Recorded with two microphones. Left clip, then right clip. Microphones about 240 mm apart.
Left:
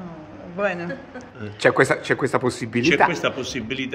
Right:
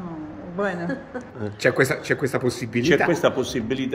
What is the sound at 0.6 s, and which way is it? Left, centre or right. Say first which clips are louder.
Speech: left 2 dB; left.